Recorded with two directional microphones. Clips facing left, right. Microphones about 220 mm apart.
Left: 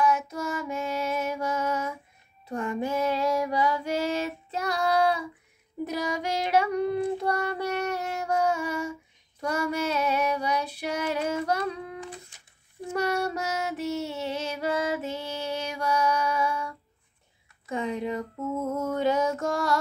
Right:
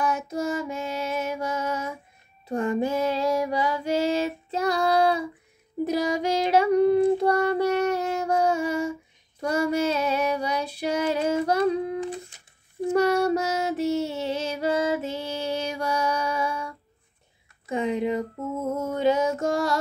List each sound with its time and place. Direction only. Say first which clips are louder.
0.0 s female singing: even; 35° right (ahead or behind)
5.9 s child singing: right 6 dB; 30° right (ahead or behind)
12.8 s female singing: right 7 dB; 30° right (ahead or behind)
17.6 s a sound: right 4 dB; 20° right (ahead or behind)
18.7 s music: right 4 dB; 25° right (ahead or behind)